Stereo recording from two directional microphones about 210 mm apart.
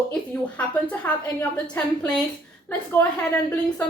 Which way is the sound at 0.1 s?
5° left (ahead or behind).